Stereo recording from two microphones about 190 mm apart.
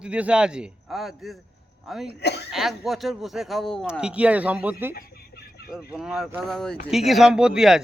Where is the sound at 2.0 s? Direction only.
60° left (ahead or behind).